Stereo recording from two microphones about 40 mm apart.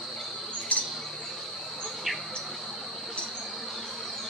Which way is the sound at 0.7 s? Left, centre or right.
Left.